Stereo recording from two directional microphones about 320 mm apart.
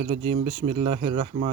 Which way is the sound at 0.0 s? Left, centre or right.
Right.